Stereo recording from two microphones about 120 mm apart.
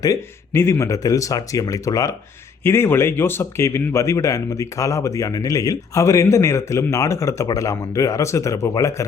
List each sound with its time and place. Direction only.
0.0 s speech: 25° left (ahead or behind)